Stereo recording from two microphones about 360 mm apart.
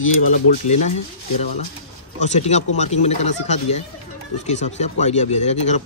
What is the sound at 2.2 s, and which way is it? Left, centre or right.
A child's voice, centre.